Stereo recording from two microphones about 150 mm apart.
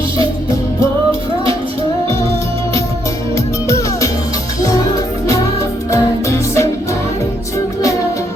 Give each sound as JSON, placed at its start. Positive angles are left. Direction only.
{"t": 3.3, "sound": "music", "side_deg": 20}
{"t": 5.9, "sound": "music", "side_deg": 20}